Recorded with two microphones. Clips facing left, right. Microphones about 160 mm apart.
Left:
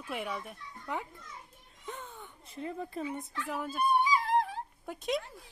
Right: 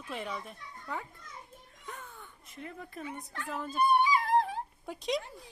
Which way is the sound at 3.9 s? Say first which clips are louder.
Right 1 dB; 70° right (ahead or behind).